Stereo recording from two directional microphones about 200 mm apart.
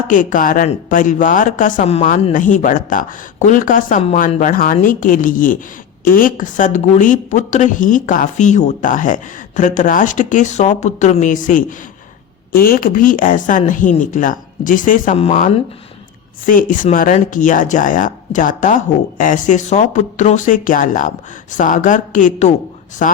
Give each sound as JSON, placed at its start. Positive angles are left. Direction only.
{"t": 0.1, "sound": "speech", "side_deg": 40}